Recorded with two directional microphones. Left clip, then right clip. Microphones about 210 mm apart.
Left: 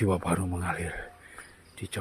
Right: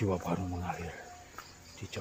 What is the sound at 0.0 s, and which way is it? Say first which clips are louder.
Speech: left 5 dB; 40° left (ahead or behind).